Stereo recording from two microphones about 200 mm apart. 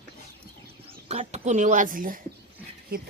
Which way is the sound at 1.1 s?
35° right (ahead or behind).